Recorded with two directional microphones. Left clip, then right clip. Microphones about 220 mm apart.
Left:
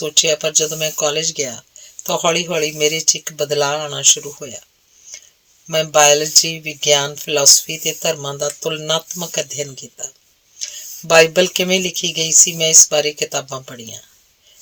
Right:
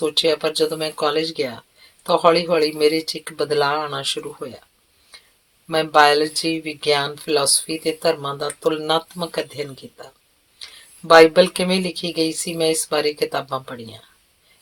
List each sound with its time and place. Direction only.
0.0 s speech: 35° left (ahead or behind)
5.9 s speech: 35° left (ahead or behind)
11.1 s speech: 35° left (ahead or behind)